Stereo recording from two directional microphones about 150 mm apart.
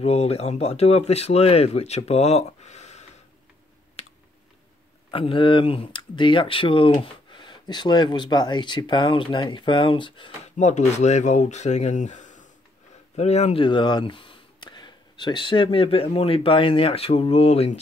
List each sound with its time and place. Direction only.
0.0 s speech: 45° left (ahead or behind)
4.0 s typing: 45° left (ahead or behind)
5.1 s speech: 35° left (ahead or behind)
10.6 s speech: 50° left (ahead or behind)